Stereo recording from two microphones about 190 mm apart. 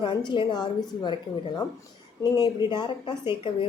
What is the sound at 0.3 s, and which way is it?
Speech, 20° left (ahead or behind).